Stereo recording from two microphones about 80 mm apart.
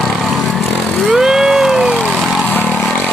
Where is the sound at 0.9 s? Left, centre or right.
Centre.